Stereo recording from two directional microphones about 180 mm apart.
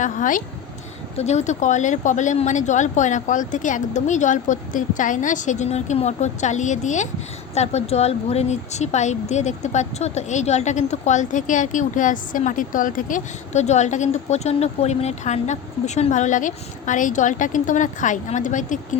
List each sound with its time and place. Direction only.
0.0 s speech: 45° left (ahead or behind)